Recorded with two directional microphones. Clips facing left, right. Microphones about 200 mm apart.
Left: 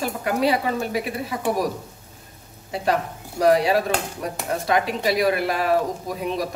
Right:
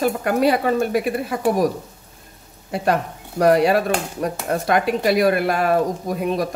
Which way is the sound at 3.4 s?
55° right (ahead or behind).